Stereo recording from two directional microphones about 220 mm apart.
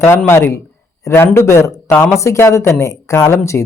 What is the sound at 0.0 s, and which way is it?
Speech, 10° left (ahead or behind).